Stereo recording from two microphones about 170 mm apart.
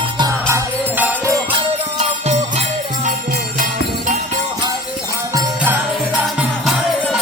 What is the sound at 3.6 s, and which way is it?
Jingle bell, 45° right (ahead or behind).